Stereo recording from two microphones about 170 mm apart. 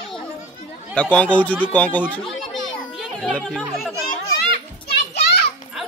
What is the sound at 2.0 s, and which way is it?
Children playing, centre (ahead or behind).